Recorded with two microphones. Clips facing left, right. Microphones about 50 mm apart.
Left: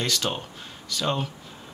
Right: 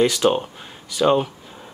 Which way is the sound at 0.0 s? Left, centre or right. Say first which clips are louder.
Right 10 dB; centre.